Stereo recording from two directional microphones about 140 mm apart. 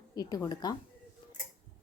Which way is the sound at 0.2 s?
25° left (ahead or behind).